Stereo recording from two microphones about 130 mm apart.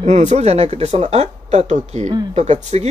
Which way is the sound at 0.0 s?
65° right (ahead or behind).